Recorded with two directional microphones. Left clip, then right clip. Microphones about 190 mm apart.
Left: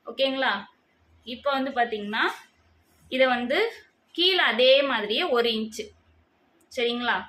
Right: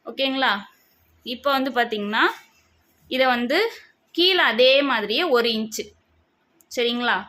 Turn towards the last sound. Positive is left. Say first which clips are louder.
# right 4 dB
turn(degrees=-45)  # may be behind; listen again after turning